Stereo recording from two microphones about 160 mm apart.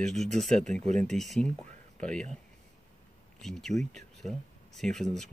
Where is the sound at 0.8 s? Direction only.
45° right (ahead or behind).